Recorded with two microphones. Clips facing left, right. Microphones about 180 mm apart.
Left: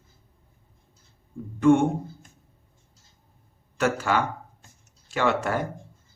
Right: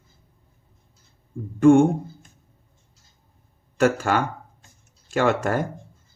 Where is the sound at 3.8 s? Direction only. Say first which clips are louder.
Right 4 dB; 50° right (ahead or behind).